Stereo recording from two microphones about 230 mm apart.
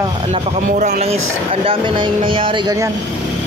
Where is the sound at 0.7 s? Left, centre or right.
Right; by 2.9 s centre.